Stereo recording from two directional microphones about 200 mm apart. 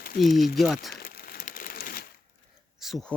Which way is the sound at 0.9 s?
45° left (ahead or behind).